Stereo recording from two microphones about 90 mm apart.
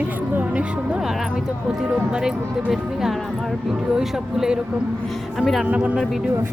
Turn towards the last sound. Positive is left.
turn(degrees=-15)  # may be behind; listen again after turning